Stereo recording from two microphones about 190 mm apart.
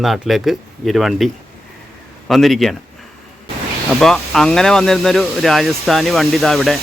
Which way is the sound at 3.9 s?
Centre (ahead or behind).